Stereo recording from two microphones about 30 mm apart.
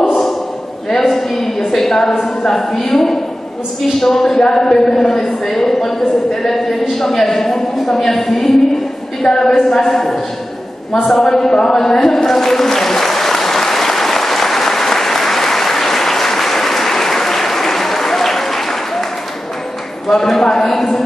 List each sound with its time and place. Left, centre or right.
0.8 s a man's voice: centre
11.1 s a sound: left
20.1 s a woman's voice: centre